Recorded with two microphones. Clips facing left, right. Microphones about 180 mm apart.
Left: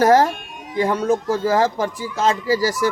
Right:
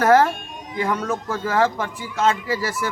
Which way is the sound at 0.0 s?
35° left (ahead or behind).